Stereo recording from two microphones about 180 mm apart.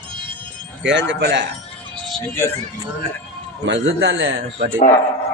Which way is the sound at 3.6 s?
85° right.